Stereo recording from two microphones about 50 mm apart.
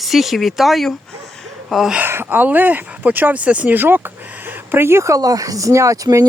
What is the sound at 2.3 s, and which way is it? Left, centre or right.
Speech, right.